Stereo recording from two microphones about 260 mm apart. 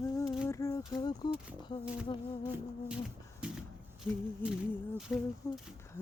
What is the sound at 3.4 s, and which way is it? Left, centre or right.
Shuffle, centre.